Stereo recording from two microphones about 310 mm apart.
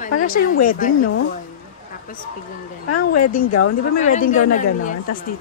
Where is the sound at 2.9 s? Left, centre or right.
Left.